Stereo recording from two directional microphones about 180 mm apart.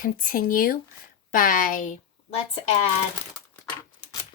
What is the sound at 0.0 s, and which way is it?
Speech, 50° left (ahead or behind).